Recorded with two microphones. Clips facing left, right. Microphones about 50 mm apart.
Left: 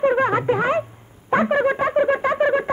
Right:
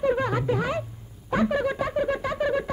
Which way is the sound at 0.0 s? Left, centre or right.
Left.